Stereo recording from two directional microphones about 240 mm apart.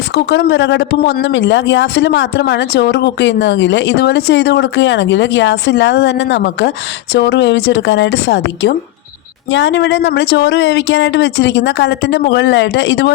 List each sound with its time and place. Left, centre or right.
0.1 s speech: left